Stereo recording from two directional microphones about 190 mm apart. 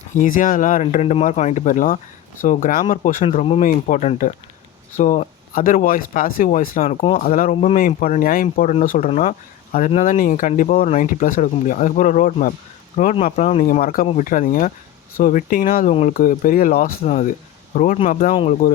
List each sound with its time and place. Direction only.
0.1 s speech: 45° left (ahead or behind)
6.8 s speech: 30° left (ahead or behind)
7.2 s speech: 45° left (ahead or behind)
7.5 s speech: 35° left (ahead or behind)
7.8 s speech: 45° left (ahead or behind)
9.0 s speech: 35° left (ahead or behind)
17.1 s speech: 40° left (ahead or behind)